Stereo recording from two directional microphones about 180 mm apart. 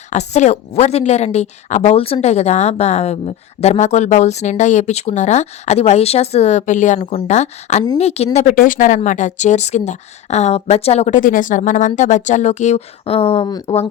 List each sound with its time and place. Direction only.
0.1 s a woman's voice: 40° left (ahead or behind)